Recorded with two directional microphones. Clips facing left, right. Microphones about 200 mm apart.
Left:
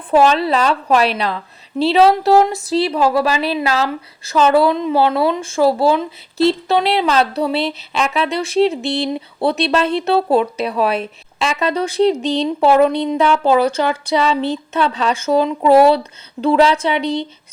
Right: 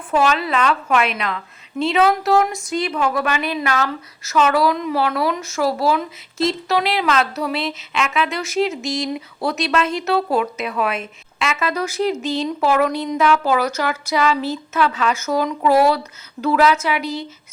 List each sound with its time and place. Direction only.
0.1 s speech: 30° left (ahead or behind)